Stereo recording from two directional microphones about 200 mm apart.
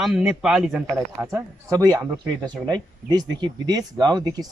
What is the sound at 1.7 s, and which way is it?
Speech, 15° right (ahead or behind).